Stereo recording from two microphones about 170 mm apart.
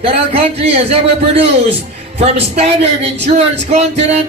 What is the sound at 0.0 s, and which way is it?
Speech, 35° right (ahead or behind).